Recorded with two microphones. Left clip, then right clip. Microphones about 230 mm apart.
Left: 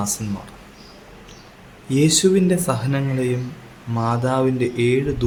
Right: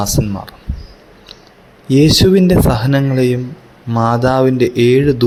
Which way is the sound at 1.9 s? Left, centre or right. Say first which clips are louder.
Right 7 dB; right.